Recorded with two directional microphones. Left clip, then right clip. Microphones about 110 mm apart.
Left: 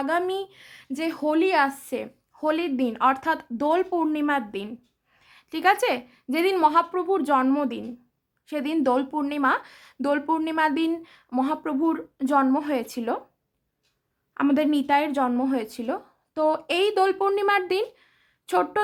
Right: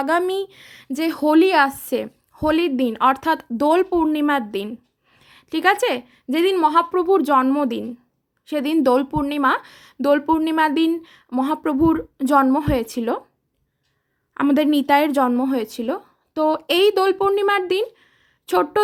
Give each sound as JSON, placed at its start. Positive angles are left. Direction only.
{"t": 0.0, "sound": "a woman's voice", "side_deg": -45}
{"t": 5.1, "sound": "a woman's voice", "side_deg": -35}
{"t": 6.9, "sound": "speech", "side_deg": -55}
{"t": 7.2, "sound": "a woman's voice", "side_deg": -35}
{"t": 11.6, "sound": "a woman's voice", "side_deg": -55}
{"t": 14.3, "sound": "a woman's voice", "side_deg": -40}
{"t": 15.3, "sound": "speech", "side_deg": -35}
{"t": 18.5, "sound": "speech", "side_deg": -45}